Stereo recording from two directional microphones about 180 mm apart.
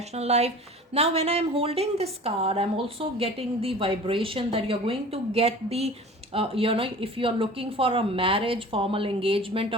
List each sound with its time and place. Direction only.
0.1 s a woman's voice: 35° right (ahead or behind)